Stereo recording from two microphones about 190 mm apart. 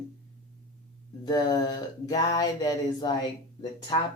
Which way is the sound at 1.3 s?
20° left (ahead or behind).